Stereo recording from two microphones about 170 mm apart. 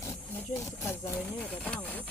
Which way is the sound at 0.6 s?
15° left (ahead or behind).